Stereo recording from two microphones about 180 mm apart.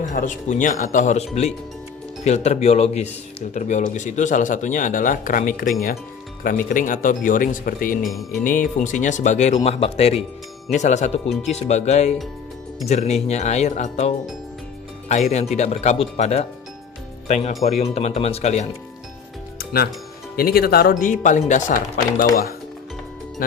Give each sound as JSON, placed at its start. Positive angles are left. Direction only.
{"t": 0.1, "sound": "speech", "side_deg": 45}
{"t": 8.0, "sound": "music", "side_deg": 0}
{"t": 8.4, "sound": "speech", "side_deg": 45}
{"t": 15.1, "sound": "speech", "side_deg": 40}
{"t": 17.5, "sound": "music", "side_deg": 0}
{"t": 17.7, "sound": "speech", "side_deg": 35}
{"t": 19.5, "sound": "music", "side_deg": 60}
{"t": 20.3, "sound": "speech", "side_deg": 55}
{"t": 21.7, "sound": "speech", "side_deg": 50}
{"t": 23.4, "sound": "speech", "side_deg": 50}